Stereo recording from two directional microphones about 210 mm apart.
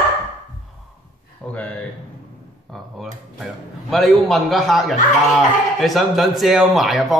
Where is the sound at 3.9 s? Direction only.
Centre (ahead or behind).